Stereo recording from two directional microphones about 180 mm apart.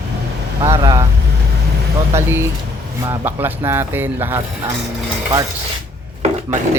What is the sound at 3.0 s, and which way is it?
Speech, 10° right (ahead or behind).